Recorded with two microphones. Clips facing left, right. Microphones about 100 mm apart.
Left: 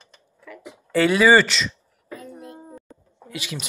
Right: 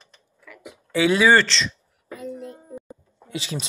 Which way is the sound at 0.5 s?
30° left (ahead or behind).